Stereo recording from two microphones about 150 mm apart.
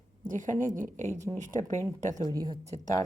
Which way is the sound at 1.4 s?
60° right (ahead or behind).